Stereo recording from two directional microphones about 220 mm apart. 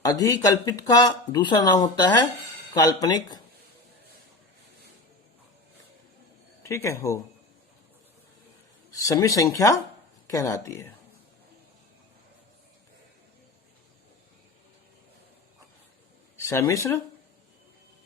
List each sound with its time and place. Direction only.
0.0 s speech: 15° left (ahead or behind)
6.6 s a man's voice: 10° left (ahead or behind)
9.0 s speech: 15° left (ahead or behind)
16.4 s speech: 15° left (ahead or behind)